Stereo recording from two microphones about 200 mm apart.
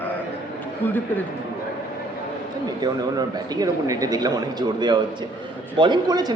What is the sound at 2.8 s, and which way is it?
A man's voice, 20° right (ahead or behind).